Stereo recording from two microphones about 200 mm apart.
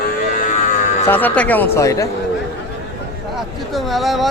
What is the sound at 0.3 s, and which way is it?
Cattle, 40° left (ahead or behind).